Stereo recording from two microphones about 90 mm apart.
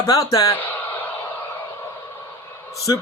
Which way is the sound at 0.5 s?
20° left (ahead or behind).